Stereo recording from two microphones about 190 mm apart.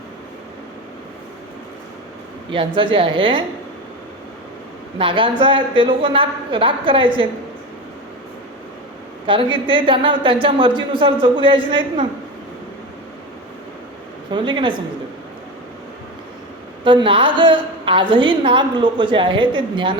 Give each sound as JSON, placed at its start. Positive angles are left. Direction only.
{"t": 2.5, "sound": "a woman's voice", "side_deg": -25}
{"t": 4.9, "sound": "a woman's voice", "side_deg": -25}
{"t": 9.2, "sound": "a woman's voice", "side_deg": -25}
{"t": 14.3, "sound": "a woman's voice", "side_deg": -25}
{"t": 16.8, "sound": "a woman's voice", "side_deg": -25}